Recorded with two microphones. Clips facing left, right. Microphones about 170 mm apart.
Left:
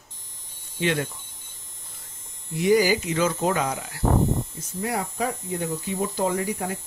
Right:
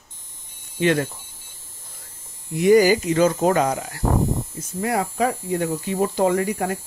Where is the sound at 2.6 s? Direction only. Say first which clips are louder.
Right 5 dB; 50° right (ahead or behind).